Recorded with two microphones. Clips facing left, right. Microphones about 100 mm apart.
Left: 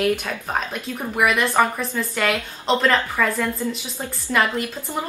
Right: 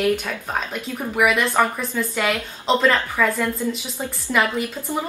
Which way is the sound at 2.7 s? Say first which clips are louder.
Right 1 dB; centre (ahead or behind).